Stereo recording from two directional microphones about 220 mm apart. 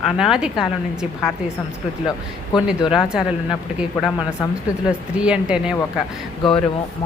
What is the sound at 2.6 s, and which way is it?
Speech, 5° right (ahead or behind).